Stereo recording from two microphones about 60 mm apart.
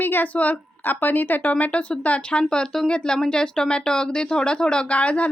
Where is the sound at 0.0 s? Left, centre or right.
Left.